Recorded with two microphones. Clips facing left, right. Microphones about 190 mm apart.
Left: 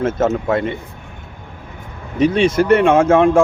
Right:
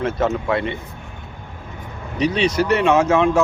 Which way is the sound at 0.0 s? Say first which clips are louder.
Left 3 dB; 45° left (ahead or behind).